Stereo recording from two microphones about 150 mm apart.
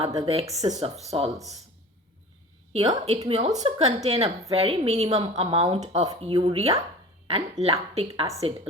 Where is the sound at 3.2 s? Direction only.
45° right (ahead or behind).